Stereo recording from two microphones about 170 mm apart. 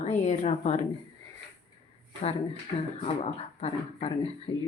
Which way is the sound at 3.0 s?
40° left (ahead or behind).